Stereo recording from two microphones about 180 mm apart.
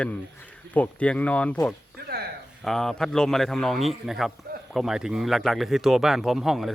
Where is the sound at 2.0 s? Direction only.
60° right (ahead or behind).